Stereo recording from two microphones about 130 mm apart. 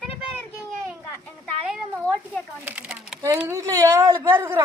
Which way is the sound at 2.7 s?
10° right (ahead or behind).